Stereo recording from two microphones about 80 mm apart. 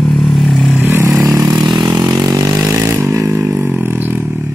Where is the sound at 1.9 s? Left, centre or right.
Right.